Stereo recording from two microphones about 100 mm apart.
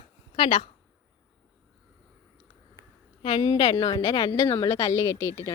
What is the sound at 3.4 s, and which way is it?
A woman's voice, 40° left (ahead or behind).